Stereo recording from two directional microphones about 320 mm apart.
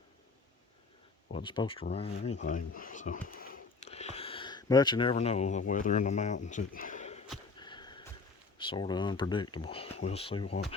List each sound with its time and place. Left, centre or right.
1.3 s speech: centre
7.6 s a sound: centre
8.5 s speech: centre